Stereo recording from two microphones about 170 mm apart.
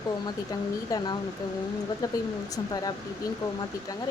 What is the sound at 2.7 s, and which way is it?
Speech, 20° left (ahead or behind).